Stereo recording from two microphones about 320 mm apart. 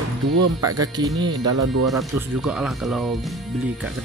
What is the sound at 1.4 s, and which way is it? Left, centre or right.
Speech, right.